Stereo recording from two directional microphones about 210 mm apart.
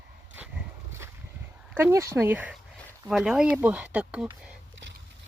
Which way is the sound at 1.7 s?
10° right (ahead or behind).